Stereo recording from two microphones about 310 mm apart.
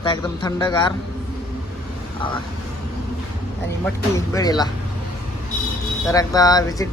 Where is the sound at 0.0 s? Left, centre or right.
Centre.